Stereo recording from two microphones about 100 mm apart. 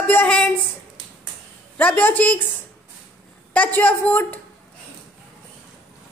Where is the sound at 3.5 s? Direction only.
20° left (ahead or behind).